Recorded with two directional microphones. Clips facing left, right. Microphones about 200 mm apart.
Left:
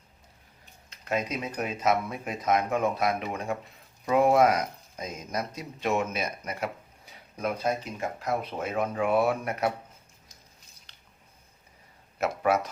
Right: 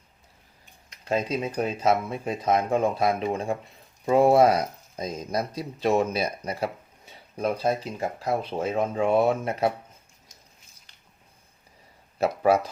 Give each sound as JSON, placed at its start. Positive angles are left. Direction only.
{"t": 1.0, "sound": "speech", "side_deg": -30}
{"t": 12.2, "sound": "speech", "side_deg": -30}